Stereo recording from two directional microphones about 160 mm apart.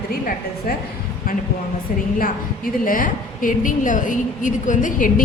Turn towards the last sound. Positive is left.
turn(degrees=55)  # may be behind; listen again after turning